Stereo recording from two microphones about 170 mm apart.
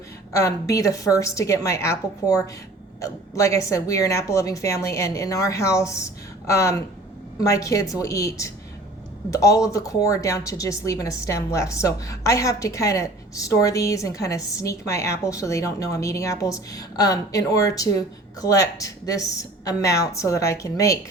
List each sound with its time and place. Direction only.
0.3 s a woman's voice: 20° left (ahead or behind)